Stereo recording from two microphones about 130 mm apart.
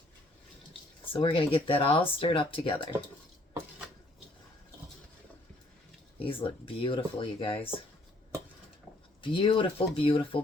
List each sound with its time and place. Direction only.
1.1 s speech: 40° left (ahead or behind)
6.1 s speech: 45° left (ahead or behind)
9.2 s speech: 40° left (ahead or behind)